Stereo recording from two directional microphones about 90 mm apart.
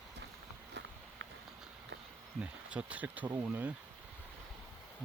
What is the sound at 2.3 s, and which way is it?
Speech, 15° right (ahead or behind).